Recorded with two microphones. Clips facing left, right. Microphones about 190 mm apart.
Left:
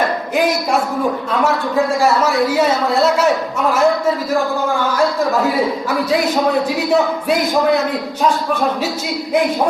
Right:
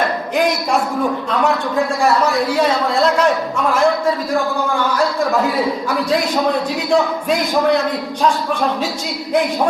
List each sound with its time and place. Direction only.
6.9 s a man's voice: 10° left (ahead or behind)